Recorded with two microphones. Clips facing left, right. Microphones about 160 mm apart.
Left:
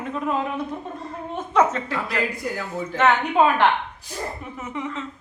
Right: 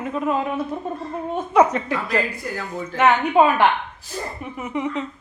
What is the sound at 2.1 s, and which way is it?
Speech, 15° left (ahead or behind).